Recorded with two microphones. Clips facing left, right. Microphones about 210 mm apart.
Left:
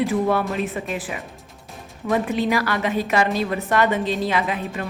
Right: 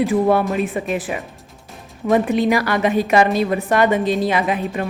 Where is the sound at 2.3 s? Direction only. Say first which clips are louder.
Right 4 dB; 15° right (ahead or behind).